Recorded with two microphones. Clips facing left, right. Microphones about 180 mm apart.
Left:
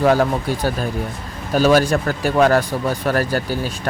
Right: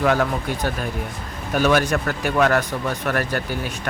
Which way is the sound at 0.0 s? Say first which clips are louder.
Left 4 dB; 30° left (ahead or behind).